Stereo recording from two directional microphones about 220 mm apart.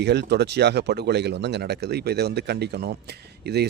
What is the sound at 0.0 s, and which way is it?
Speech, 50° right (ahead or behind).